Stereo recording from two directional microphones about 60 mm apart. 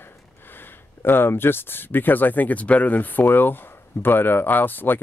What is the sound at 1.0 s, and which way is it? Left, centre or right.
Speech, left.